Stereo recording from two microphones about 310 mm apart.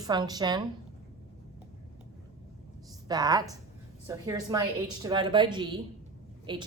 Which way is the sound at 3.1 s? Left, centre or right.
Centre.